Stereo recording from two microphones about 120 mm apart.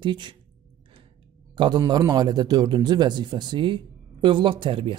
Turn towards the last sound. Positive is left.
turn(degrees=-45)  # may be behind; listen again after turning